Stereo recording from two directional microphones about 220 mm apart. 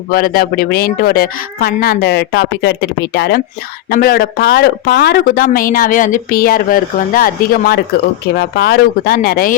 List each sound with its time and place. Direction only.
0.1 s a woman's voice: 40° left (ahead or behind)